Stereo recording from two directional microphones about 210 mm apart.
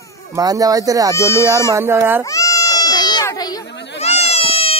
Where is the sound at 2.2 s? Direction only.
15° left (ahead or behind).